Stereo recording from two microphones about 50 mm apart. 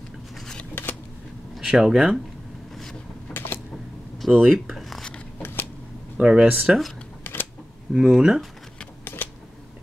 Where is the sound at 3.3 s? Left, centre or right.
Centre.